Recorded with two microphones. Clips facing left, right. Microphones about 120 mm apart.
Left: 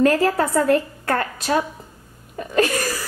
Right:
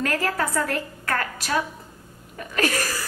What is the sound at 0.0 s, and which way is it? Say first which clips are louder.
A woman's voice: left 8 dB; 25° left (ahead or behind).